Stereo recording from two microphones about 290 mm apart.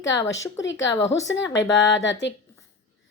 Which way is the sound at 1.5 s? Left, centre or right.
Left.